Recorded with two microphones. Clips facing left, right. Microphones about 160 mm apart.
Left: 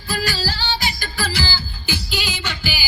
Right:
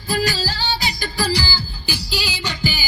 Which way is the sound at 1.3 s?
10° right (ahead or behind).